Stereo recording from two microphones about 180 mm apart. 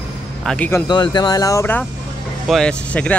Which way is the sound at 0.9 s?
25° left (ahead or behind).